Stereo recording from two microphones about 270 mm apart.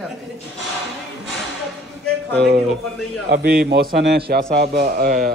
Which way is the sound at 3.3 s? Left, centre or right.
Right.